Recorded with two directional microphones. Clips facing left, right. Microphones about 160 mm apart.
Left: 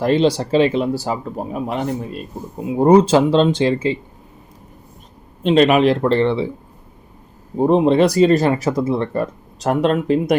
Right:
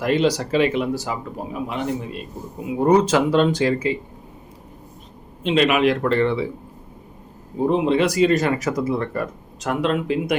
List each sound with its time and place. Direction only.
0.0 s speech: 30° left (ahead or behind)
2.6 s speech: 30° left (ahead or behind)
5.4 s speech: 40° left (ahead or behind)
7.5 s speech: 40° left (ahead or behind)